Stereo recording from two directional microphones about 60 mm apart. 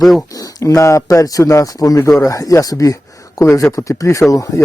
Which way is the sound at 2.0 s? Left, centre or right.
Left.